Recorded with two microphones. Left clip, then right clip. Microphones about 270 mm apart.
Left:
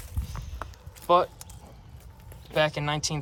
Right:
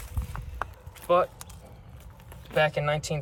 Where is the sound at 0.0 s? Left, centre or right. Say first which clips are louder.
Right 1 dB; centre.